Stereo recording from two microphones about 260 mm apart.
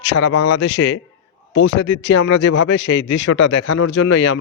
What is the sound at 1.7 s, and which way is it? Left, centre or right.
Speech, left.